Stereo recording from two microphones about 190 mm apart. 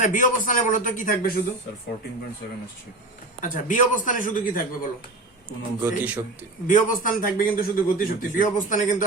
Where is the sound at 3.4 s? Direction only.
40° left (ahead or behind).